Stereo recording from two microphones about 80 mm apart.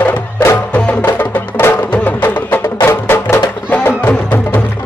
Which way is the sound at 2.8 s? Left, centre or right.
Left.